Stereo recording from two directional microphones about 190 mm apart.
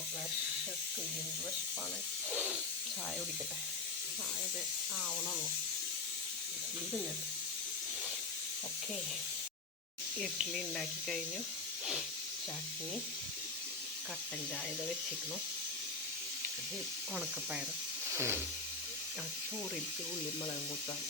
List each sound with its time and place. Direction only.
10.2 s speech: centre (ahead or behind)
18.1 s hiss: 15° right (ahead or behind)